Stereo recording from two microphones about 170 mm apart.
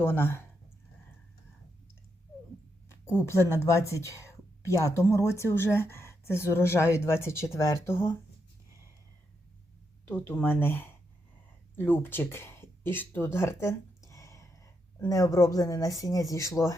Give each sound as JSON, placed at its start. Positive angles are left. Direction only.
{"t": 0.0, "sound": "a woman's voice", "side_deg": 15}
{"t": 3.1, "sound": "a woman's voice", "side_deg": 15}
{"t": 10.1, "sound": "a woman's voice", "side_deg": 10}